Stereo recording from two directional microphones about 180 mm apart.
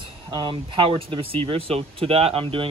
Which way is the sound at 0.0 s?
25° right (ahead or behind).